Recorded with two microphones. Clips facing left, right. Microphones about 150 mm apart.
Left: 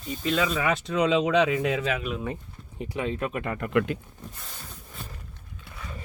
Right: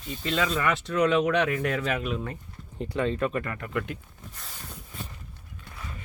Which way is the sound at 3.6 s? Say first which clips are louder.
Left 7 dB; 75° left (ahead or behind).